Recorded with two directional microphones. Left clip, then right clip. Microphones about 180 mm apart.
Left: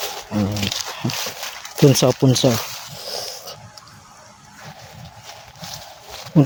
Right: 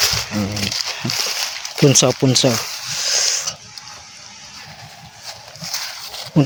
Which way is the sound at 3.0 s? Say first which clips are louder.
Right 12 dB; 15° left (ahead or behind).